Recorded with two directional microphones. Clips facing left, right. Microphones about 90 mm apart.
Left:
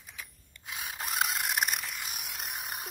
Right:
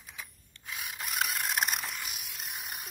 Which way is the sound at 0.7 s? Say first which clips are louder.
Left 2 dB; 25° left (ahead or behind).